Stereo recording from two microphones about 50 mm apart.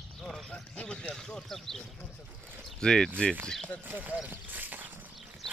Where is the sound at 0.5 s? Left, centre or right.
Centre.